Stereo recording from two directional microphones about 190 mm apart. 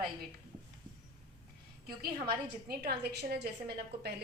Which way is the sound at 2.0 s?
55° right (ahead or behind).